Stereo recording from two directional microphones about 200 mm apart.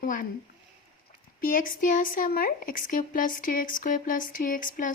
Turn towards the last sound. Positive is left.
turn(degrees=40)  # may be behind; listen again after turning